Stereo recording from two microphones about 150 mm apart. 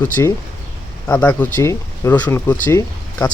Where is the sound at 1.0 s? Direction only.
10° left (ahead or behind).